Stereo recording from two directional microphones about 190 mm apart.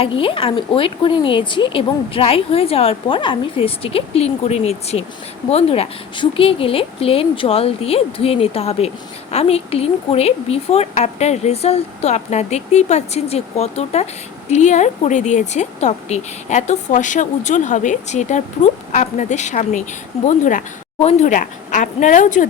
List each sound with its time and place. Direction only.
0.2 s a woman's voice: 30° left (ahead or behind)